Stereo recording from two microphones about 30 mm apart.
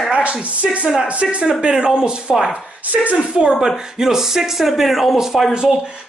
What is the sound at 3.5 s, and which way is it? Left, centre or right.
Speech, centre.